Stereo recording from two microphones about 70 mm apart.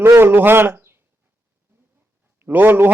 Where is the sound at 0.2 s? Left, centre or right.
Right.